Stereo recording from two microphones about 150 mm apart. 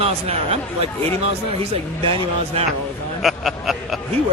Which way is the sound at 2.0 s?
35° right (ahead or behind).